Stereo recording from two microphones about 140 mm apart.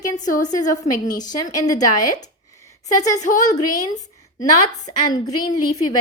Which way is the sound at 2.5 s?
20° left (ahead or behind).